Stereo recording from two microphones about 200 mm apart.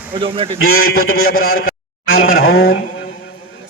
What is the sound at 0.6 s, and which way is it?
A man's voice, 90° left.